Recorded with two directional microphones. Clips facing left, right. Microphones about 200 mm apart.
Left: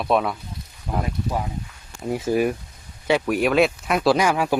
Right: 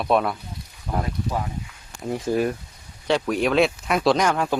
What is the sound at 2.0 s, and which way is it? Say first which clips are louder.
Speech: left 2 dB; 5° left (ahead or behind).